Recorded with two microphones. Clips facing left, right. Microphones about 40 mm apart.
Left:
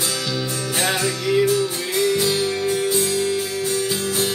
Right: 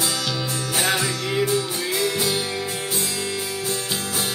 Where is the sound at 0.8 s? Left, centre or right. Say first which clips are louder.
Left 1 dB; centre.